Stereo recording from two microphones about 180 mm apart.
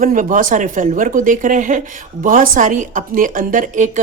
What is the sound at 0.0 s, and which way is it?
Speech, 50° right (ahead or behind).